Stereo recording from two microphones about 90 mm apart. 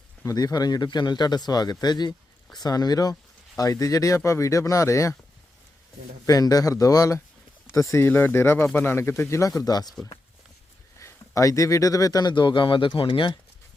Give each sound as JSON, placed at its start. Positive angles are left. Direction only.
{"t": 0.3, "sound": "speech", "side_deg": 45}
{"t": 6.2, "sound": "speech", "side_deg": 45}
{"t": 9.6, "sound": "speech", "side_deg": 45}
{"t": 11.0, "sound": "speech", "side_deg": 35}
{"t": 12.3, "sound": "speech", "side_deg": 60}